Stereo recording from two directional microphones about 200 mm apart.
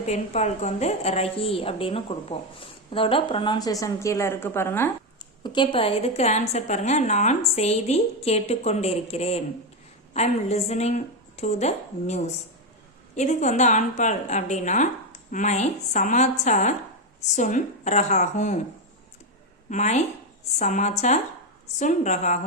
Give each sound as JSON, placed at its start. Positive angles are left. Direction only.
{"t": 0.0, "sound": "a woman's voice", "side_deg": 35}
{"t": 5.4, "sound": "a woman's voice", "side_deg": 25}
{"t": 19.7, "sound": "a woman's voice", "side_deg": 35}